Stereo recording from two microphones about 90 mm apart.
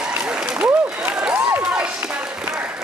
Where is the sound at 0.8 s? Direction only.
10° right (ahead or behind).